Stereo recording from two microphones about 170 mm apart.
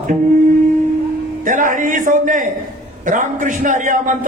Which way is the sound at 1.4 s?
50° right (ahead or behind).